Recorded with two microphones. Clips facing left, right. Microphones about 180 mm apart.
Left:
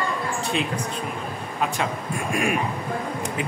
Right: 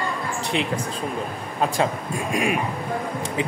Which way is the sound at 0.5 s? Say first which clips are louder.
Right 2 dB; 25° right (ahead or behind).